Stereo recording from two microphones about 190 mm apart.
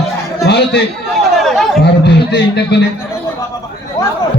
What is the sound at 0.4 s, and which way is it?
Speech, 60° left (ahead or behind).